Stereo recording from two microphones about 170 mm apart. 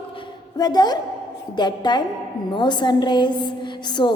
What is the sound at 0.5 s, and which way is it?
A woman's voice, 25° left (ahead or behind).